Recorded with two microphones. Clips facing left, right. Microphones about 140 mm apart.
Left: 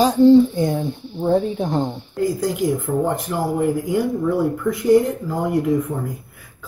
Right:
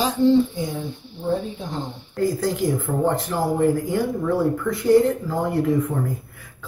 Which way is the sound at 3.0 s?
15° left (ahead or behind).